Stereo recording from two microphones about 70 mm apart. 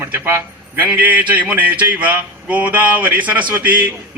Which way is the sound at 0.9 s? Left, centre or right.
Right.